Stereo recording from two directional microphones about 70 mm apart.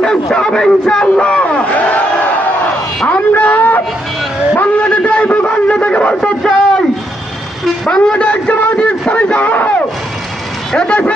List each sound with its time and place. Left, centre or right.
0.0 s a man's voice: centre; by 3.8 s left
4.6 s a sound: centre
10.7 s a man's voice: centre